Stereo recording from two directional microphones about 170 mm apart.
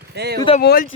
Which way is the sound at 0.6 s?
70° left (ahead or behind).